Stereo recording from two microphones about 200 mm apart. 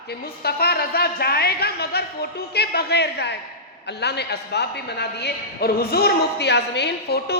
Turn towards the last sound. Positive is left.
turn(degrees=55)  # may be behind; listen again after turning